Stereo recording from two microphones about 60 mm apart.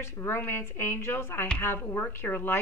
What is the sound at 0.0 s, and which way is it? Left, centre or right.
A woman's voice, left.